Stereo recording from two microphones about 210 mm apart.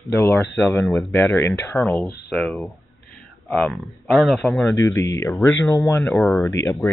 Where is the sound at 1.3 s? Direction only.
10° left (ahead or behind).